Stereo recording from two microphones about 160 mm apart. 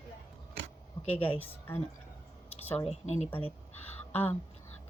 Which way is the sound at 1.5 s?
15° left (ahead or behind).